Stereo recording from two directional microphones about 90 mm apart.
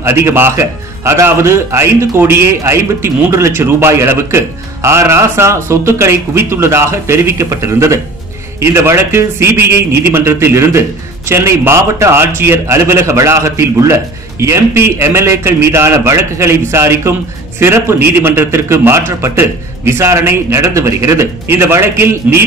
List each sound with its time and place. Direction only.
0.0 s a man's voice: 30° right (ahead or behind)